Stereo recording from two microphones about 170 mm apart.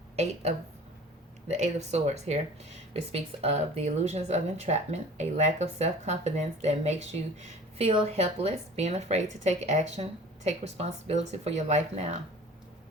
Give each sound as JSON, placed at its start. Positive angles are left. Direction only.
{"t": 1.5, "sound": "a woman's voice", "side_deg": -40}